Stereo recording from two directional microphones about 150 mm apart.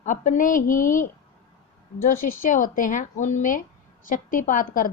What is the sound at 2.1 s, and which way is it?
A woman's voice, 65° left (ahead or behind).